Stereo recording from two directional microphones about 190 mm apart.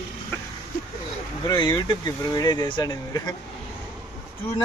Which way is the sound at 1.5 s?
25° left (ahead or behind).